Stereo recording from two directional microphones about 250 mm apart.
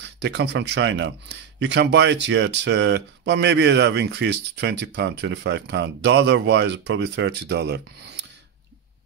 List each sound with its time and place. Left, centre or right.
0.2 s speech: right